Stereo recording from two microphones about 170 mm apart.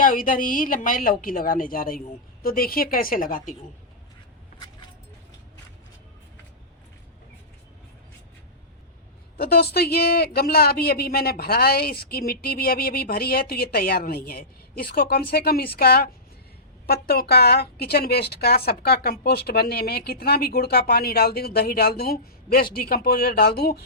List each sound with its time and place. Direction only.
0.0 s a man's voice: 55° left (ahead or behind)
9.4 s a man's voice: 65° left (ahead or behind)